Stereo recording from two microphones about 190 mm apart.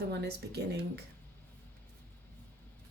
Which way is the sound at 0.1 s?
60° right (ahead or behind).